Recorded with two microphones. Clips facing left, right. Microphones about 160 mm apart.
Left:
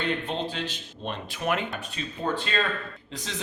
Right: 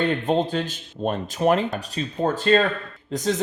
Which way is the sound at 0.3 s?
45° right (ahead or behind).